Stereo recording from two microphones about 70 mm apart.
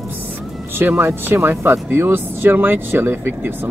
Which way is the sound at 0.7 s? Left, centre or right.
Right.